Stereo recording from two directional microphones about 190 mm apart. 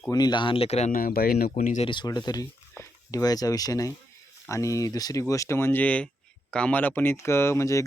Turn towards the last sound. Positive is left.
turn(degrees=15)  # may be behind; listen again after turning